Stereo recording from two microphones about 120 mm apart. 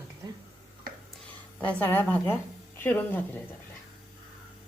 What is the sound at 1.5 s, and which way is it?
A woman's voice, 15° left (ahead or behind).